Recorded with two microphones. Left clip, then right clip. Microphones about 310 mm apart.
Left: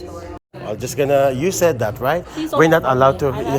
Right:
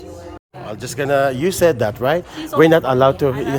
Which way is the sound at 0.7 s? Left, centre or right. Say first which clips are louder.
Left 2 dB; centre.